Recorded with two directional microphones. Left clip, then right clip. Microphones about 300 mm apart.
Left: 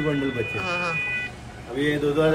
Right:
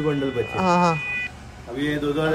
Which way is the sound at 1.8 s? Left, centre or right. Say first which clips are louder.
Left 2 dB; centre.